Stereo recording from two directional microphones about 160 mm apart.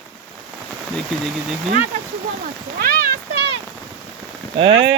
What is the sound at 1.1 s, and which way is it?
Speech, 5° left (ahead or behind).